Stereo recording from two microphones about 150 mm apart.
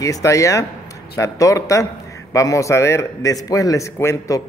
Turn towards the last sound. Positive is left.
turn(degrees=20)  # may be behind; listen again after turning